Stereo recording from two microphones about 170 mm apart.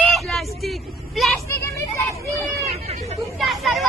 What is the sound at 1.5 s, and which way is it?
Vehicle, 15° left (ahead or behind).